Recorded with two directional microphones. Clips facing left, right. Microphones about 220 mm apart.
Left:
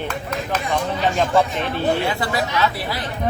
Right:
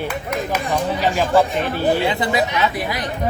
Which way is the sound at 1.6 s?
35° right (ahead or behind).